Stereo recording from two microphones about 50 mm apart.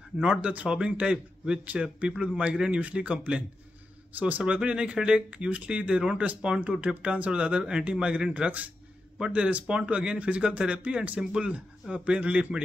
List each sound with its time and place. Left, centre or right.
0.2 s speech: right